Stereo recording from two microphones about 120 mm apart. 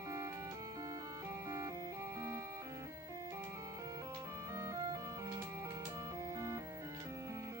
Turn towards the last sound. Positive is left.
turn(degrees=-25)  # may be behind; listen again after turning